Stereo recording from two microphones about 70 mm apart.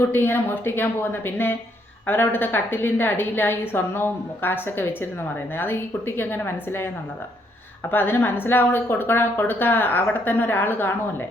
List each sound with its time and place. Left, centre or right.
0.1 s a woman's voice: left